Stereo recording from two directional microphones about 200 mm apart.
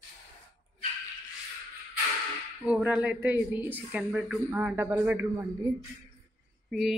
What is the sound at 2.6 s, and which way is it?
A woman's voice, 5° right (ahead or behind).